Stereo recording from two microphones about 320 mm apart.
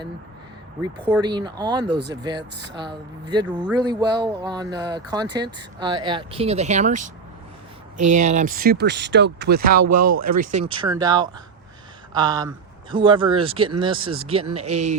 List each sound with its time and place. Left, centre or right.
1.1 s speech: centre
8.3 s speech: right
9.8 s speech: right
10.2 s speech: right